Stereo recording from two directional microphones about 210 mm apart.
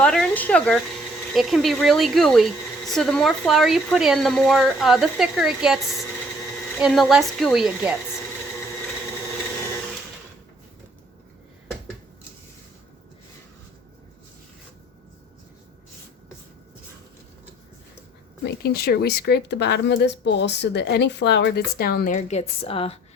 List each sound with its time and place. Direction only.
0.0 s speech: 5° left (ahead or behind)
18.4 s speech: 50° left (ahead or behind); by 23.0 s 25° left (ahead or behind)